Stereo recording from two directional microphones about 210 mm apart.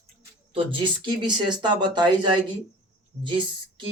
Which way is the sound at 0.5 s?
25° right (ahead or behind).